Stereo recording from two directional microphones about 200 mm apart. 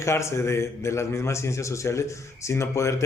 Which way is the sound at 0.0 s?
15° left (ahead or behind).